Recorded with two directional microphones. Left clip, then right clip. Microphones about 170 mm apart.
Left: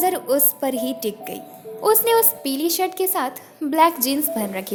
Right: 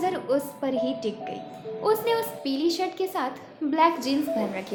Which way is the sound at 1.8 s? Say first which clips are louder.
Left 7 dB; 55° left (ahead or behind).